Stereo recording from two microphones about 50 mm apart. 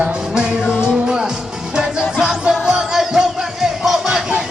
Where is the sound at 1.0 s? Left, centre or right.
Centre.